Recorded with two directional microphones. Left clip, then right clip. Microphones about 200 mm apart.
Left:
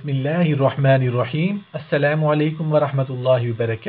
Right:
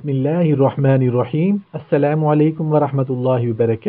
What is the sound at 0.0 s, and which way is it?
A man's voice, 40° right (ahead or behind).